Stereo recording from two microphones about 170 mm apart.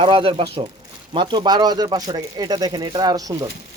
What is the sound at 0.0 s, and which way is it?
Speech, 30° right (ahead or behind).